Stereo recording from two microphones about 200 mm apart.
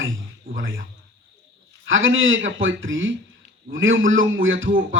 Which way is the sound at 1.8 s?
75° right (ahead or behind).